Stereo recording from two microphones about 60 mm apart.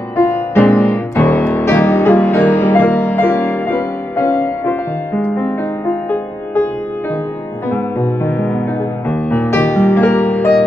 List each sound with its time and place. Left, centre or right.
0.2 s music: left
1.3 s music: left
1.6 s music: left
4.3 s music: left
7.7 s music: left
9.5 s music: left
10.0 s music: left